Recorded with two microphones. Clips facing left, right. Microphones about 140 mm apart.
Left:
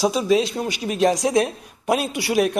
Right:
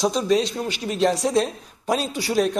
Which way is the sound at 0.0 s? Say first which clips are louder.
Left 2 dB; 5° left (ahead or behind).